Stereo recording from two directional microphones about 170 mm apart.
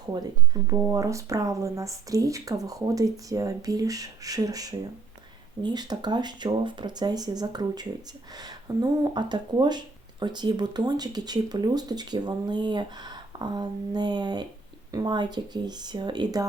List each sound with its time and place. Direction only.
0.1 s speech: 25° right (ahead or behind)